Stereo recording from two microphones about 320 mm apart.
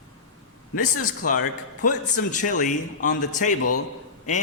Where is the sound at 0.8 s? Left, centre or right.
Left.